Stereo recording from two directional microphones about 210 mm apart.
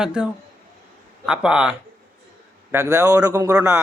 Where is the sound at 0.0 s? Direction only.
5° right (ahead or behind).